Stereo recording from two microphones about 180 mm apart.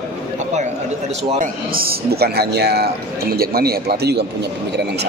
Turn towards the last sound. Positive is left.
turn(degrees=-65)  # may be behind; listen again after turning